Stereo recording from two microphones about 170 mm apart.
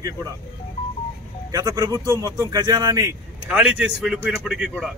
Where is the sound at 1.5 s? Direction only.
20° right (ahead or behind).